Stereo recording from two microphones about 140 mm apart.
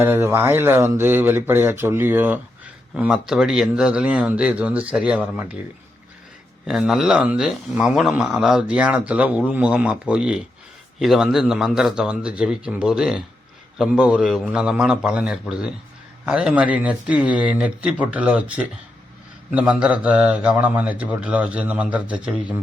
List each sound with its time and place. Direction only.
0.0 s speech: 20° right (ahead or behind)
2.9 s speech: 5° right (ahead or behind)
6.7 s a man's voice: 5° right (ahead or behind)